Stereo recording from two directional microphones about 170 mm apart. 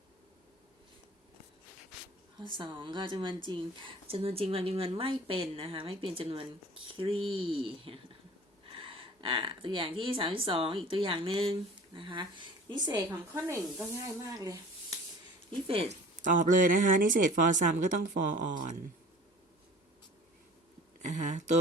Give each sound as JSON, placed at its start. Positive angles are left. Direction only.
{"t": 2.4, "sound": "speech", "side_deg": -30}
{"t": 15.6, "sound": "speech", "side_deg": -35}
{"t": 16.2, "sound": "speech", "side_deg": -50}
{"t": 21.0, "sound": "speech", "side_deg": -45}